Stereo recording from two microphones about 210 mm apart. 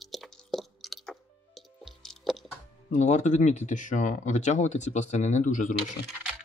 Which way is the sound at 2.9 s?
35° left (ahead or behind).